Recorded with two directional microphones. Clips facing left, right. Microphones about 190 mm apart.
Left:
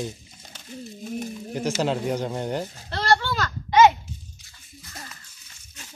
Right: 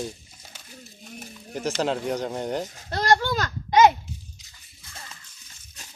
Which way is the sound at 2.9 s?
40° right (ahead or behind).